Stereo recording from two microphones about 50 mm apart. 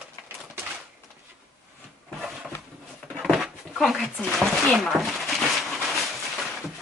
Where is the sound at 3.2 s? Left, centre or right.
Centre.